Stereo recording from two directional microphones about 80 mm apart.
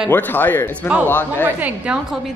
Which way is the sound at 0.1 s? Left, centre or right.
Left.